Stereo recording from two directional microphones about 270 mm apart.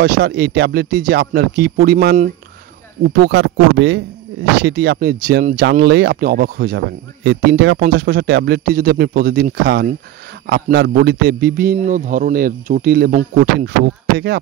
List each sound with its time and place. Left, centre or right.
0.0 s a man's voice: right